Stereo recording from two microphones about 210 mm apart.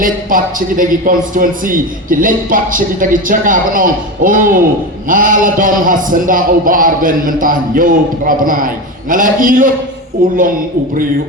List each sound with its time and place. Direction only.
0.0 s a man's voice: 40° right (ahead or behind)